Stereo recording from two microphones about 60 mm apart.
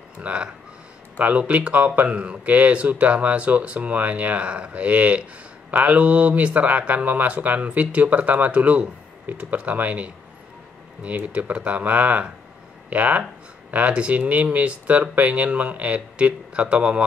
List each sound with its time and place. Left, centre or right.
0.2 s speech: centre